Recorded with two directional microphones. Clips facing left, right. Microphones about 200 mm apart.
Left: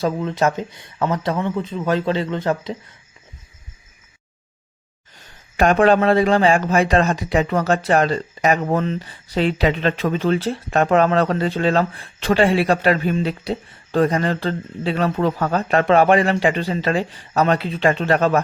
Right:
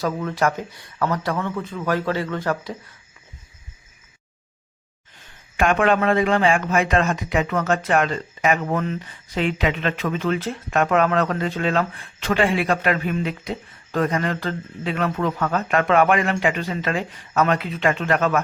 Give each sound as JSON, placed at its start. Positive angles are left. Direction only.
{"t": 0.0, "sound": "speech", "side_deg": 20}
{"t": 5.5, "sound": "a man's voice", "side_deg": 35}